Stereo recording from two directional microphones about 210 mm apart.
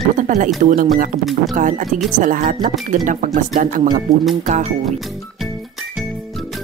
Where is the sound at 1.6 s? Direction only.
40° right (ahead or behind).